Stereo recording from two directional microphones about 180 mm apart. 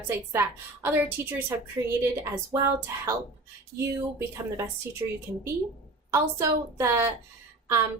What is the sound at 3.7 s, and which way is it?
Speech, 55° right (ahead or behind).